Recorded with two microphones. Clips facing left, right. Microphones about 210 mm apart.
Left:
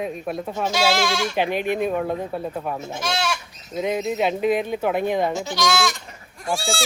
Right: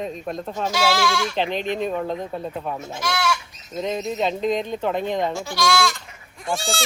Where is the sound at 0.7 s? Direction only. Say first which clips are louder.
Even; 20° left (ahead or behind).